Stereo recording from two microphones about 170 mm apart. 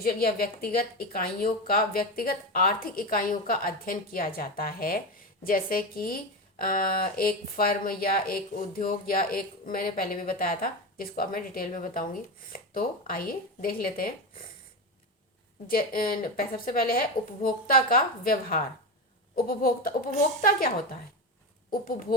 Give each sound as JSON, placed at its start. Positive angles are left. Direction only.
{"t": 0.0, "sound": "speech", "side_deg": 60}
{"t": 15.6, "sound": "speech", "side_deg": 60}